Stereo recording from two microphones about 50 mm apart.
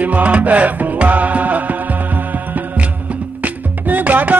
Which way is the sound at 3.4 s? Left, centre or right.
Right.